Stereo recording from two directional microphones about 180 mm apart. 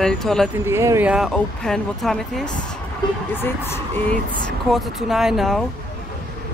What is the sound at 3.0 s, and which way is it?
Speech, 25° left (ahead or behind).